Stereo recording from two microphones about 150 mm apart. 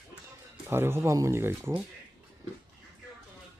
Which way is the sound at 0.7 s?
15° right (ahead or behind).